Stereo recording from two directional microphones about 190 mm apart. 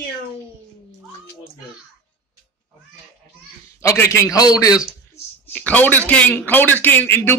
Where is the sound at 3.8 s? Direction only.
15° left (ahead or behind).